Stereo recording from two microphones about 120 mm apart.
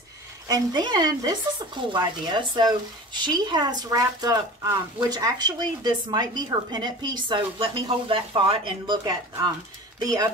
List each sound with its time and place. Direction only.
0.5 s speech: 35° right (ahead or behind)